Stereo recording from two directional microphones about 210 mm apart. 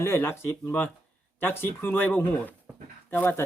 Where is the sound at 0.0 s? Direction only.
10° left (ahead or behind).